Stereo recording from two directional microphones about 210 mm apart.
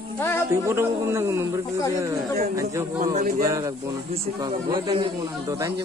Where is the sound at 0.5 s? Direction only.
10° right (ahead or behind).